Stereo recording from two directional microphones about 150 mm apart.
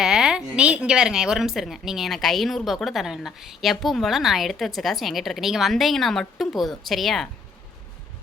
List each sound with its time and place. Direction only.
0.0 s a woman's voice: 5° right (ahead or behind)